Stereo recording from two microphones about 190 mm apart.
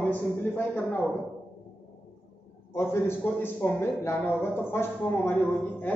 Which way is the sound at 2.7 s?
10° left (ahead or behind).